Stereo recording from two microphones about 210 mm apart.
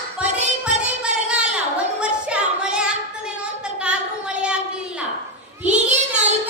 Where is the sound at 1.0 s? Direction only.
5° right (ahead or behind).